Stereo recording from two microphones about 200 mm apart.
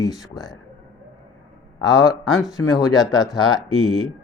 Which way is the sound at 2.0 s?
Centre (ahead or behind).